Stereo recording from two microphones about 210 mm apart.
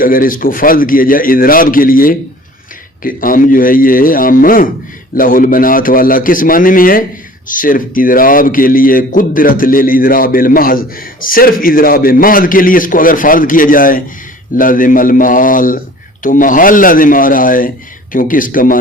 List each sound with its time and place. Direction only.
0.0 s a man's voice: 40° left (ahead or behind)